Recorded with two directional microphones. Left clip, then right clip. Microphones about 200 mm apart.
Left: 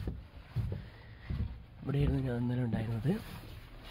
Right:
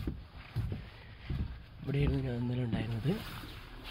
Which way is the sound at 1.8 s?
15° left (ahead or behind).